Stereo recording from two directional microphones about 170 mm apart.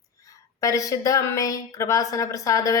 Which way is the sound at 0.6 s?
20° left (ahead or behind).